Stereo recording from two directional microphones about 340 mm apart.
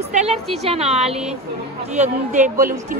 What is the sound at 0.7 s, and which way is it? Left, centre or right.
A woman's voice, centre.